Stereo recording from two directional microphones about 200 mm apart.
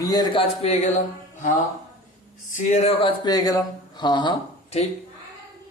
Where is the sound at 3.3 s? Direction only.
20° left (ahead or behind).